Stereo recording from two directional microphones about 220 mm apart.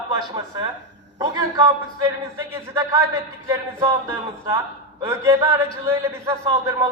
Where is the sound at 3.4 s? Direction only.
15° right (ahead or behind).